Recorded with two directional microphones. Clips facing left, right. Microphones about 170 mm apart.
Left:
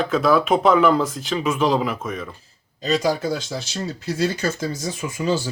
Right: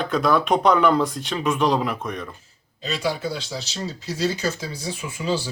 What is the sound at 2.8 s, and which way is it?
Speech, 40° left (ahead or behind).